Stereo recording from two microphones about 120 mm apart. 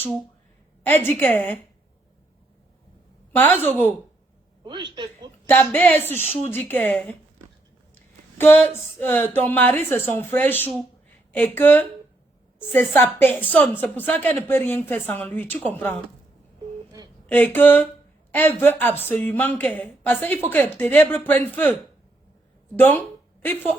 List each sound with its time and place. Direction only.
0.9 s a woman's voice: 15° left (ahead or behind)
3.4 s a woman's voice: 15° left (ahead or behind)
4.6 s a woman's voice: 40° right (ahead or behind)
5.5 s a woman's voice: 15° left (ahead or behind)
8.4 s a woman's voice: 15° left (ahead or behind)
17.2 s a woman's voice: 15° left (ahead or behind)